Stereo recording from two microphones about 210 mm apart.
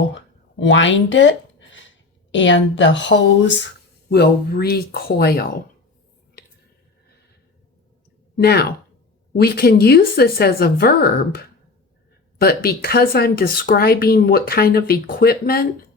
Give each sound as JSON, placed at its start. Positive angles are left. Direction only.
{"t": 0.6, "sound": "speech", "side_deg": 60}
{"t": 8.4, "sound": "speech", "side_deg": 50}